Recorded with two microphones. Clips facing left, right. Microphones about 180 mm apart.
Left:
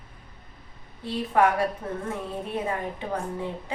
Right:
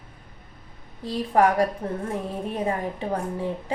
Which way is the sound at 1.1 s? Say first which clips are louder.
Right 2 dB; 35° right (ahead or behind).